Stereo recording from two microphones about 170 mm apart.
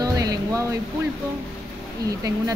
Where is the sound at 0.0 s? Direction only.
20° right (ahead or behind).